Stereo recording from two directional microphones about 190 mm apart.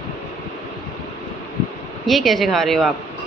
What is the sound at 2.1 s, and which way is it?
Speech, centre (ahead or behind).